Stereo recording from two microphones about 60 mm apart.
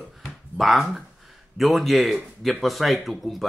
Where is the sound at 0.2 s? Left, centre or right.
Centre.